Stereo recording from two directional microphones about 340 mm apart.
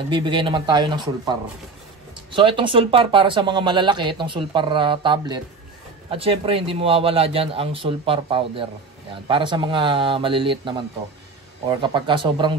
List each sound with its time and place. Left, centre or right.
0.1 s speech: centre
2.3 s speech: centre